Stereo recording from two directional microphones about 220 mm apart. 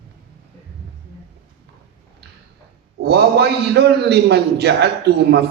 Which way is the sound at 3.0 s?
50° right (ahead or behind).